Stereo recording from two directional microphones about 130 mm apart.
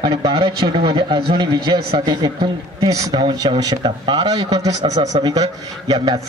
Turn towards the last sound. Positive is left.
turn(degrees=-30)  # may be behind; listen again after turning